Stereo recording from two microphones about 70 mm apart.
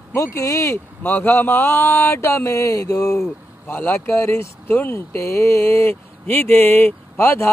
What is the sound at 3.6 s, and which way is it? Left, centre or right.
Speech, left.